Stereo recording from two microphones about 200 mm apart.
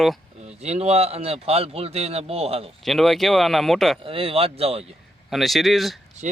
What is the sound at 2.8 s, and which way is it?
Speech, centre (ahead or behind).